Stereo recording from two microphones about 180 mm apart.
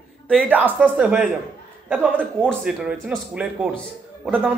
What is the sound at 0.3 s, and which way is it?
A man's voice, 10° right (ahead or behind).